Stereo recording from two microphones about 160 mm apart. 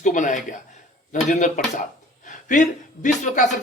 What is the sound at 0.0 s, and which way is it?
Speech, 50° left (ahead or behind).